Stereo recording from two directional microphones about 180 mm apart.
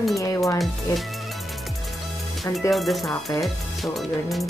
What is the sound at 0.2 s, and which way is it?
Music, 20° left (ahead or behind).